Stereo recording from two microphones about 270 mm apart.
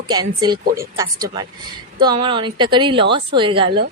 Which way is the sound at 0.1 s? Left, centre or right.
Centre.